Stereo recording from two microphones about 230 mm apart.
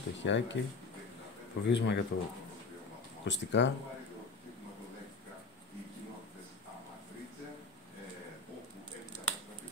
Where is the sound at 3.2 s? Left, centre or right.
Left.